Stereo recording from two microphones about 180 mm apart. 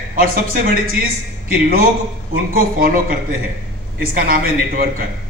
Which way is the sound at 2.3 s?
55° right (ahead or behind).